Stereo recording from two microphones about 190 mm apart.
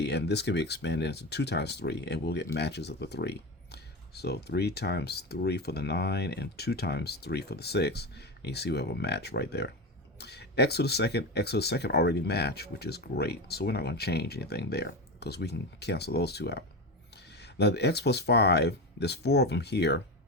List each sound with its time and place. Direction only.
0.0 s speech: 60° left (ahead or behind)